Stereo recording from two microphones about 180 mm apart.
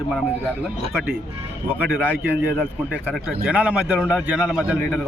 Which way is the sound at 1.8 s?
10° right (ahead or behind).